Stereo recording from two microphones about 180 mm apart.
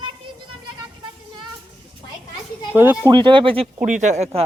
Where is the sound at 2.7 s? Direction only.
10° right (ahead or behind).